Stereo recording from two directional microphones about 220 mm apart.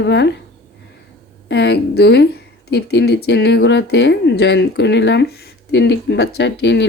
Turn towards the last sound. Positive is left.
turn(degrees=50)  # may be behind; listen again after turning